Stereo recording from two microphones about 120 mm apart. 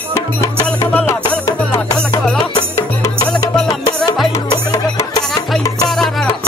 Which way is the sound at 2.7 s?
25° left (ahead or behind).